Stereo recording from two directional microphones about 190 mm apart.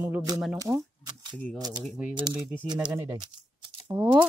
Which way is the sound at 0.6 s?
15° right (ahead or behind).